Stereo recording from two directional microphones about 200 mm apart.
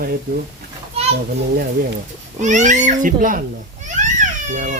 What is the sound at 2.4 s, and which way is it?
A child's voice, 35° right (ahead or behind).